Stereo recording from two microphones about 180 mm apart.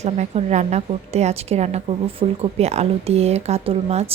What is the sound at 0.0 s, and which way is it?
A woman's voice, 40° right (ahead or behind).